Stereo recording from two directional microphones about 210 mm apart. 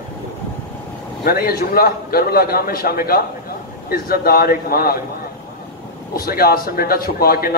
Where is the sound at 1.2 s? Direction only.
45° left (ahead or behind).